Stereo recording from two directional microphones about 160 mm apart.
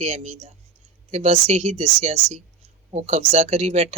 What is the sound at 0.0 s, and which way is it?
Speech, 45° right (ahead or behind).